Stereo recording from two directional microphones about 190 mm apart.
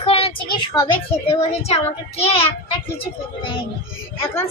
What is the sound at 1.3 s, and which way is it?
A child's voice, 35° left (ahead or behind).